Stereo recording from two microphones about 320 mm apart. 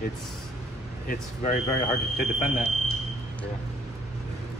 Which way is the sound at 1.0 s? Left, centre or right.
Left.